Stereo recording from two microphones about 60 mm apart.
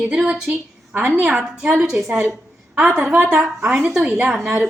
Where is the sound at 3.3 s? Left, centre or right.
Centre.